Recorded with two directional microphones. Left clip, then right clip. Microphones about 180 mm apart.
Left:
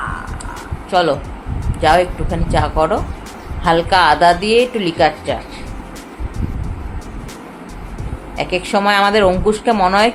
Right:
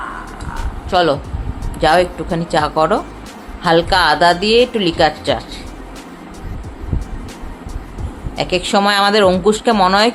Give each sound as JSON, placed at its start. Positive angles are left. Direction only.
{"t": 0.9, "sound": "a woman's voice", "side_deg": -15}
{"t": 8.4, "sound": "a woman's voice", "side_deg": -15}